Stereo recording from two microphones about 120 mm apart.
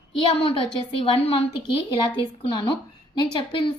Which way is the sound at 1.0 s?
55° left (ahead or behind).